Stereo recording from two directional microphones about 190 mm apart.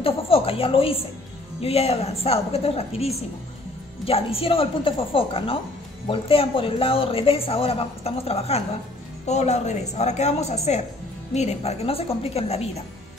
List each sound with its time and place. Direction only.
0.0 s a woman's voice: 30° left (ahead or behind)